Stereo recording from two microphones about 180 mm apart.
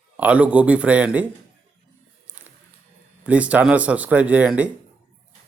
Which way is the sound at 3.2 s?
10° right (ahead or behind).